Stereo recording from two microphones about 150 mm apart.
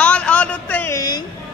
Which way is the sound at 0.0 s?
10° left (ahead or behind).